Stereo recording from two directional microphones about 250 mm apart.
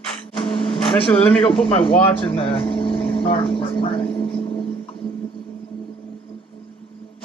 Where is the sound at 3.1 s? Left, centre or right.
Left.